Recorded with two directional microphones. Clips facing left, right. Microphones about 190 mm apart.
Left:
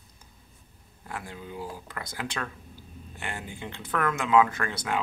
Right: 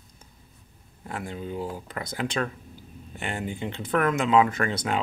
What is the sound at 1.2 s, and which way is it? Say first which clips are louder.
Speech: right 6 dB; 25° right (ahead or behind).